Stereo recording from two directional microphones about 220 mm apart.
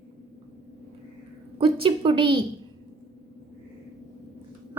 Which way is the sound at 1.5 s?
25° right (ahead or behind).